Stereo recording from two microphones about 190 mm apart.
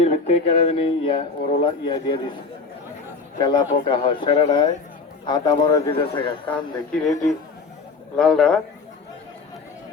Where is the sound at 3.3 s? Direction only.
25° left (ahead or behind).